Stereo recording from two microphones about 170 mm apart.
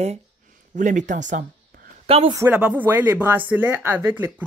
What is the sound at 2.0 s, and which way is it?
Speech, 35° right (ahead or behind).